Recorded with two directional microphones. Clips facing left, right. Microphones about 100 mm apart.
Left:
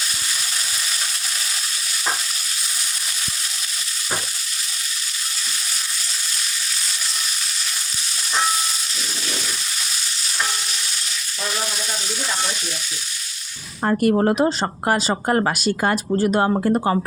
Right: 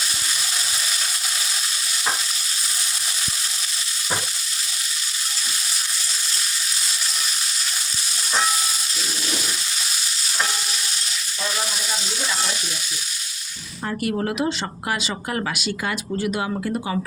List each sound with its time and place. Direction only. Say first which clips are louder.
13.8 s speech: left 7 dB; 45° left (ahead or behind)